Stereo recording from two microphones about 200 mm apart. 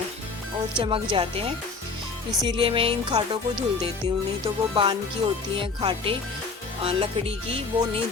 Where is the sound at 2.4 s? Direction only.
25° right (ahead or behind).